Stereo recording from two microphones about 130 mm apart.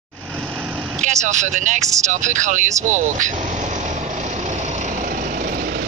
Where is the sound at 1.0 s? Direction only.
65° right (ahead or behind).